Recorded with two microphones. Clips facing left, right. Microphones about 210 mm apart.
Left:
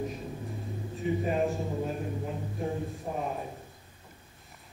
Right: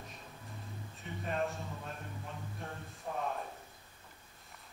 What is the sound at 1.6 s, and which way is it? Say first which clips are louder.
Speech: left 12 dB; 35° left (ahead or behind).